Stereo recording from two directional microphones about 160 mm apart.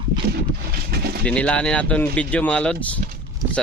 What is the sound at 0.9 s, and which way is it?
Pigeon, 75° right (ahead or behind).